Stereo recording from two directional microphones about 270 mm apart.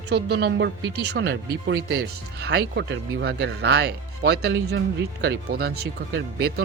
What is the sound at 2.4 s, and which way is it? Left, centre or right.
Speech, right.